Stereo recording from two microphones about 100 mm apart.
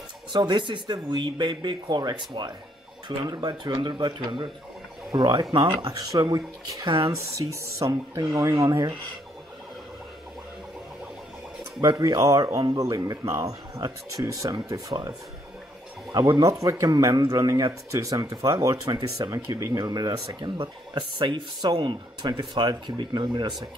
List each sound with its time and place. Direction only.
0.3 s speech: 50° right (ahead or behind)
5.9 s speech: 45° right (ahead or behind)
11.8 s speech: 40° right (ahead or behind)